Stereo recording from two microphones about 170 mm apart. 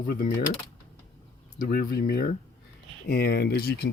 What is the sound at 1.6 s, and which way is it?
Speech, 55° left (ahead or behind).